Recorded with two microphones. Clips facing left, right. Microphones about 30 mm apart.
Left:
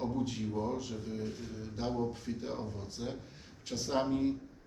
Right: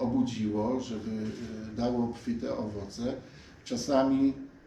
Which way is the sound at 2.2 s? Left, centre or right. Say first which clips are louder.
Right 6 dB; centre.